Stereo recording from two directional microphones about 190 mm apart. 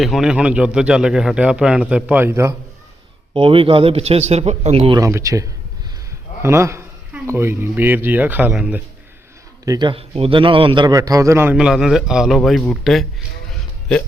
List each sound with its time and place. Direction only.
0.0 s a man's voice: centre (ahead or behind)
3.3 s a man's voice: 30° right (ahead or behind)
4.9 s a man's voice: 15° right (ahead or behind)
9.6 s a man's voice: 25° right (ahead or behind); by 13.1 s centre (ahead or behind)
13.5 s a sound: centre (ahead or behind)